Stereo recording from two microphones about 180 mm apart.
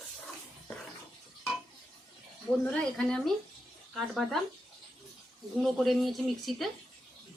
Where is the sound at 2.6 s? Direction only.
5° left (ahead or behind).